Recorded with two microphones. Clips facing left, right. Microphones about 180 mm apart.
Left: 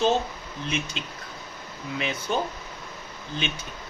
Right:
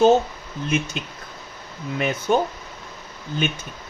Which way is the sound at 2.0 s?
50° right (ahead or behind).